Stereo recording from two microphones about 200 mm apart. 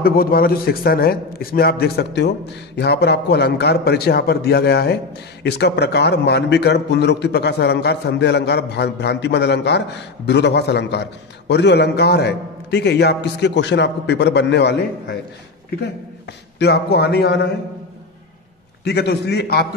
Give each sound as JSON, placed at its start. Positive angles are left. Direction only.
{"t": 0.0, "sound": "a man's voice", "side_deg": 50}
{"t": 16.5, "sound": "a man's voice", "side_deg": 55}
{"t": 18.9, "sound": "a man's voice", "side_deg": 55}